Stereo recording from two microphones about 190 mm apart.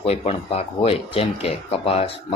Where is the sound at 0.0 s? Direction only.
30° left (ahead or behind).